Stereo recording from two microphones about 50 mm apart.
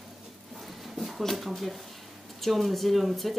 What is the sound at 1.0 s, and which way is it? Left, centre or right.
Speech, centre.